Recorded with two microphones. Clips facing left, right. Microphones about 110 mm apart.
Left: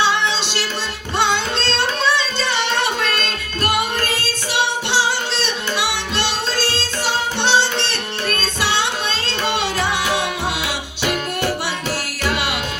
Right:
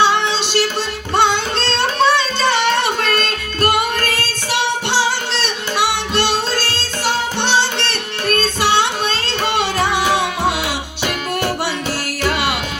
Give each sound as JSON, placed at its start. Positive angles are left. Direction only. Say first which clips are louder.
{"t": 0.0, "sound": "music", "louder": "right 3 dB", "side_deg": -50}
{"t": 4.9, "sound": "music", "louder": "right 1 dB", "side_deg": -50}